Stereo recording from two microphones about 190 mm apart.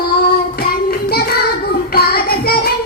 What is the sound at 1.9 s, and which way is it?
Child singing, 55° left (ahead or behind).